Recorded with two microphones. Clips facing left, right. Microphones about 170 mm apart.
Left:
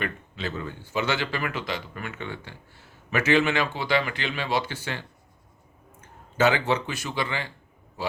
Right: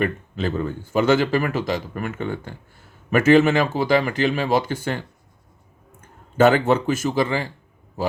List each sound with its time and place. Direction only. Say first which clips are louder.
0.0 s speech: right 8 dB; 50° right (ahead or behind)
6.3 s speech: right 7 dB; 55° right (ahead or behind)